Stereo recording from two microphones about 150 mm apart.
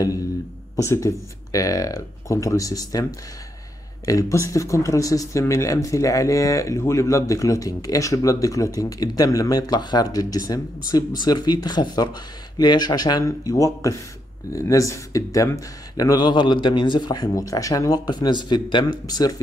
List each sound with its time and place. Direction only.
0.7 s speech: 20° left (ahead or behind)